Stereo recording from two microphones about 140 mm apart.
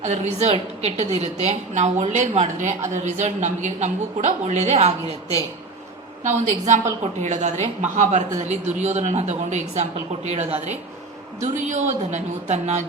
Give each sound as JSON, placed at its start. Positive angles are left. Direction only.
{"t": 0.0, "sound": "a woman's voice", "side_deg": -55}